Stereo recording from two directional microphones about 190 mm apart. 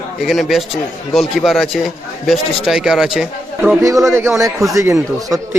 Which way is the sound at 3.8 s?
15° right (ahead or behind).